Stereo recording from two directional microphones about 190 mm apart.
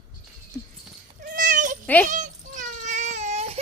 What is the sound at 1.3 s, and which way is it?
Cat, 45° right (ahead or behind).